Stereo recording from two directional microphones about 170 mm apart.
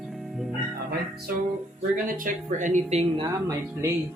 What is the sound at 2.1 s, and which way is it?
Speech, 50° right (ahead or behind).